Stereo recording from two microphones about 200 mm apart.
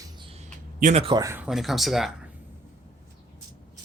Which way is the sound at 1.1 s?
15° right (ahead or behind).